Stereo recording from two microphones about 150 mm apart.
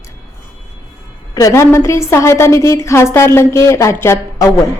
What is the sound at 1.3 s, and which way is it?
A woman's voice, 20° left (ahead or behind).